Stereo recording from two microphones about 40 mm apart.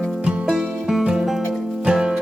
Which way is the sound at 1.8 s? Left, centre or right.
Centre.